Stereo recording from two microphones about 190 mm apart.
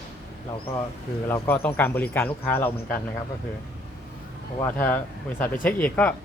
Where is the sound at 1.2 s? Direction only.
10° left (ahead or behind).